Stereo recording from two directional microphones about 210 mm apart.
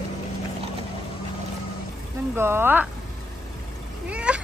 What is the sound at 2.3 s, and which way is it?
Speech, 10° right (ahead or behind).